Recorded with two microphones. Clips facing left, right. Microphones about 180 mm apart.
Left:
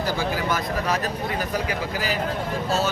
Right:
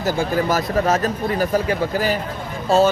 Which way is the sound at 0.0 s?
45° right (ahead or behind).